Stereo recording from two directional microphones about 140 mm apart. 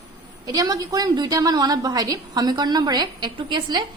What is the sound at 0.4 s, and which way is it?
A woman's voice, 30° right (ahead or behind).